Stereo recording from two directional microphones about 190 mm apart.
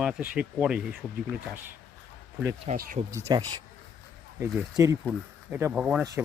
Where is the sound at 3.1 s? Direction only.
15° right (ahead or behind).